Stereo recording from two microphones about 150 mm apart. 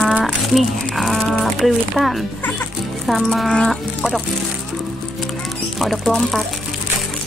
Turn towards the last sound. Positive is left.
turn(degrees=0)  # may be behind; listen again after turning